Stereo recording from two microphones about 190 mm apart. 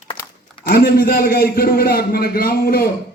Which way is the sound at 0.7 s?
55° left (ahead or behind).